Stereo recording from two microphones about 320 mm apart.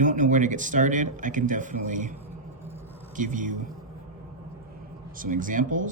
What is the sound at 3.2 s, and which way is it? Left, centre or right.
Speech, right.